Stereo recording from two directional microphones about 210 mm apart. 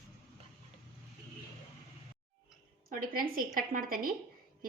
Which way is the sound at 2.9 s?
40° right (ahead or behind).